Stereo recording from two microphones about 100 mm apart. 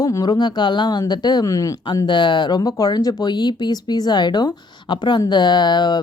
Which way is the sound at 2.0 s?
50° left (ahead or behind).